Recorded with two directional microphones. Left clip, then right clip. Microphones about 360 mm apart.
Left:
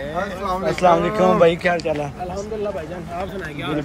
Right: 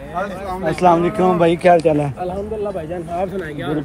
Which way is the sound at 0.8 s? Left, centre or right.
Centre.